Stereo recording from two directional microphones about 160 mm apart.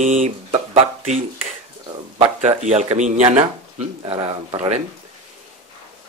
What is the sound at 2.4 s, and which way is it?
A man's voice, 45° right (ahead or behind).